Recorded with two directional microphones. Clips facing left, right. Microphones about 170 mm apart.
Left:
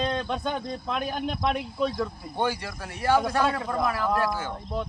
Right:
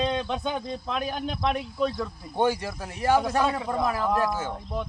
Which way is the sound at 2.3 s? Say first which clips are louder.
Right 4 dB; 20° right (ahead or behind).